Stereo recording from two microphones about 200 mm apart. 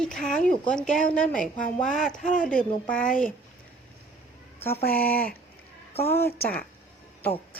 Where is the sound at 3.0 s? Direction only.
40° left (ahead or behind).